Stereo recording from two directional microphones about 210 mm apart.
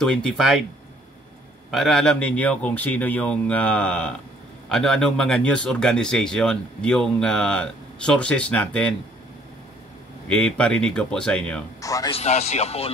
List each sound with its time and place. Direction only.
0.0 s speech: centre (ahead or behind)
1.7 s speech: centre (ahead or behind)
10.2 s speech: 5° left (ahead or behind)
11.8 s speech: 15° left (ahead or behind)
12.1 s speech: 30° left (ahead or behind)